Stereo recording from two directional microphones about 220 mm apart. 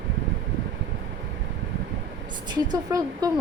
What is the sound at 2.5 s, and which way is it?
Speech, 15° right (ahead or behind).